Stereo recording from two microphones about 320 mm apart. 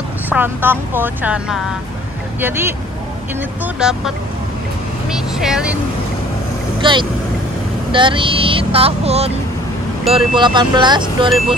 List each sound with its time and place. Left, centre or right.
0.3 s speech: centre
5.1 s speech: centre
6.8 s speech: centre
11.2 s speech: centre